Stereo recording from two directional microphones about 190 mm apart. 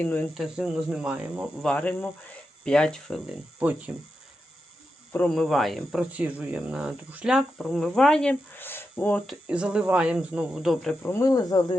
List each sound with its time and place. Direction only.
0.0 s speech: 10° left (ahead or behind)
0.4 s speech: 5° right (ahead or behind)
1.6 s speech: 5° left (ahead or behind)
5.1 s speech: 5° left (ahead or behind)
9.3 s speech: 5° right (ahead or behind)
11.0 s speech: 15° left (ahead or behind)